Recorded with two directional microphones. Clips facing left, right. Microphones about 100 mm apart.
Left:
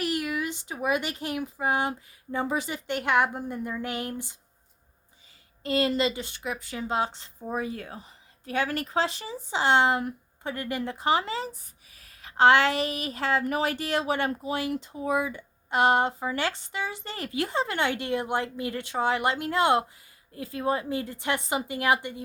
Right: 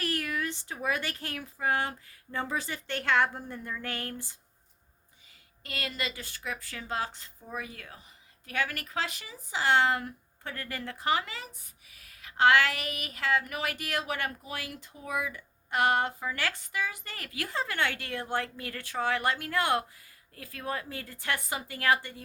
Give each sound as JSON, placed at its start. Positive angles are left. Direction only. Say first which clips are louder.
{"t": 0.0, "sound": "speech", "louder": "left 4 dB", "side_deg": 15}
{"t": 5.6, "sound": "speech", "louder": "left 12 dB", "side_deg": 25}